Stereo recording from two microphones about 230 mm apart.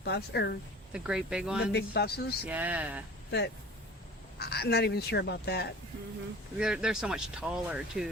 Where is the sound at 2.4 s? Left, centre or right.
Centre.